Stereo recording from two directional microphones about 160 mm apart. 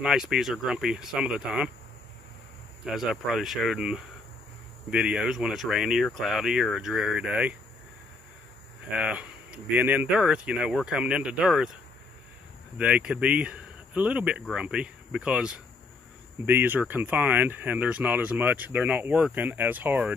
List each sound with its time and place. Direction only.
0.0 s speech: 5° right (ahead or behind)
2.8 s speech: 5° right (ahead or behind)
8.9 s speech: 5° right (ahead or behind)
12.7 s speech: 10° right (ahead or behind)